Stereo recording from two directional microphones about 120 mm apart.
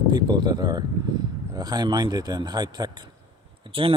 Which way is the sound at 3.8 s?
50° right (ahead or behind).